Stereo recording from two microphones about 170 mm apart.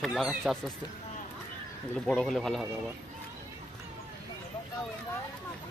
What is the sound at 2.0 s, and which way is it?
Speech, centre (ahead or behind).